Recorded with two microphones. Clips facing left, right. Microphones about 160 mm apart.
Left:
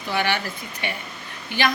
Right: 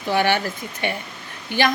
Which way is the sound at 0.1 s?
45° right (ahead or behind).